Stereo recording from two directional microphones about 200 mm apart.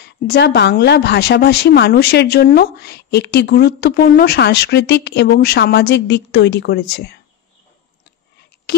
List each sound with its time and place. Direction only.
0.0 s a woman's voice: 55° left (ahead or behind)